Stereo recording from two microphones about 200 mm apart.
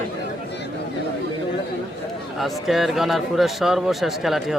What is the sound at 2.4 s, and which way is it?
Speech, centre (ahead or behind).